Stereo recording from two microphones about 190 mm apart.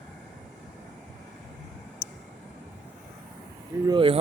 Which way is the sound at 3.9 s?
25° right (ahead or behind).